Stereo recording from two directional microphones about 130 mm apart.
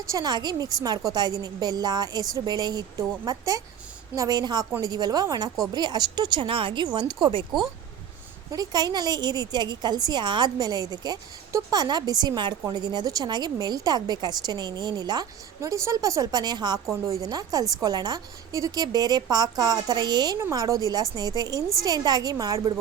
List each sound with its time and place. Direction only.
0.0 s a woman's voice: 25° right (ahead or behind)
8.4 s a woman's voice: 30° right (ahead or behind)